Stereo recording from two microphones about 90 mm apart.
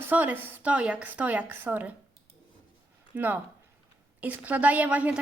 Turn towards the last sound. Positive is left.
turn(degrees=-15)  # may be behind; listen again after turning